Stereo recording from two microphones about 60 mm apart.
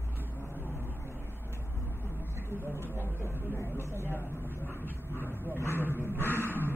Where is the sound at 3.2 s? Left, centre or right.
Left.